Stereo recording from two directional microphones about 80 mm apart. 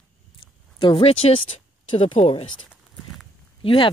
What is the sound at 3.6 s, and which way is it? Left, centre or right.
Speech, left.